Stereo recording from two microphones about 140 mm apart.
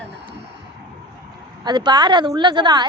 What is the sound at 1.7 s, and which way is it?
A woman's voice, 30° right (ahead or behind).